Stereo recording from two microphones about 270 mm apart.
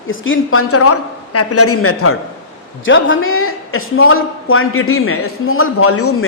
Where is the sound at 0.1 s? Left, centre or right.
Left.